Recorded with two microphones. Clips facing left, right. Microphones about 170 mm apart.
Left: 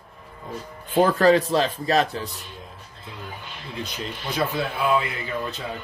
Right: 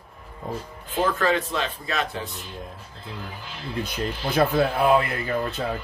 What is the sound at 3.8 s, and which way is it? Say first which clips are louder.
Speech: right 3 dB; 55° right (ahead or behind).